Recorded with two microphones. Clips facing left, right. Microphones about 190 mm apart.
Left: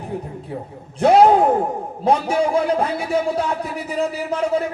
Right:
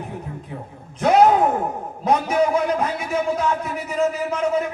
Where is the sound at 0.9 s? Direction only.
30° left (ahead or behind).